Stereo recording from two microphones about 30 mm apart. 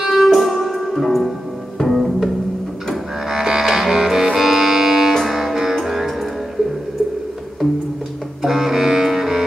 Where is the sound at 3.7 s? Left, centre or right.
Centre.